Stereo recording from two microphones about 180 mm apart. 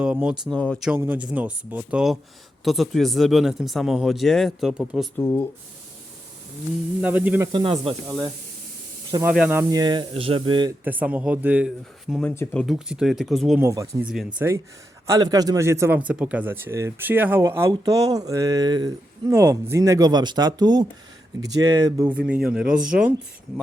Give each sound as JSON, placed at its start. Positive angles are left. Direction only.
{"t": 0.0, "sound": "speech", "side_deg": -5}
{"t": 0.5, "sound": "speech", "side_deg": 5}
{"t": 0.9, "sound": "speech", "side_deg": -10}
{"t": 5.1, "sound": "speech", "side_deg": 15}
{"t": 7.0, "sound": "speech", "side_deg": -10}
{"t": 7.5, "sound": "speech", "side_deg": -30}
{"t": 9.2, "sound": "speech", "side_deg": -5}
{"t": 10.8, "sound": "speech", "side_deg": -10}
{"t": 12.3, "sound": "speech", "side_deg": 15}
{"t": 12.6, "sound": "speech", "side_deg": -5}
{"t": 13.6, "sound": "speech", "side_deg": -15}